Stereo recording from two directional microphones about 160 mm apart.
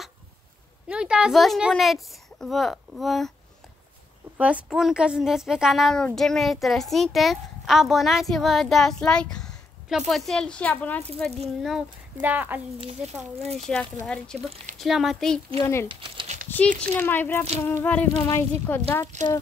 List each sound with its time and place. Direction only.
0.8 s speech: 5° right (ahead or behind)
4.4 s speech: 5° right (ahead or behind)
11.6 s speech: 5° right (ahead or behind)
13.7 s speech: 5° left (ahead or behind)
15.6 s a sound: 15° left (ahead or behind)
15.9 s speech: 30° right (ahead or behind)
16.4 s a sound: 10° left (ahead or behind)
19.1 s speech: 45° right (ahead or behind)